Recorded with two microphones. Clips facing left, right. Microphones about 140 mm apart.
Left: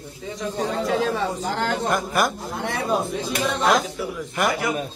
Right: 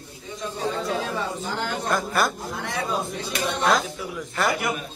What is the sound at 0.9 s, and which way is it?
Speech, 90° left.